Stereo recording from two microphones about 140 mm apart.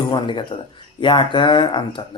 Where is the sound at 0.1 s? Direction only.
35° left (ahead or behind).